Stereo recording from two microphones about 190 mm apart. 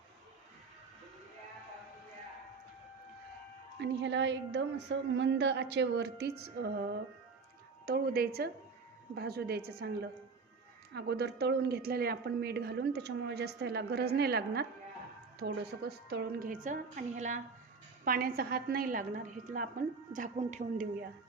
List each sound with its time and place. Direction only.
3.8 s a woman's voice: 70° right (ahead or behind); by 17.4 s 40° right (ahead or behind)
18.0 s a woman's voice: 50° right (ahead or behind)